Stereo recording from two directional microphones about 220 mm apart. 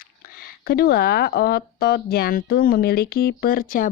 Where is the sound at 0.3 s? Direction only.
45° left (ahead or behind).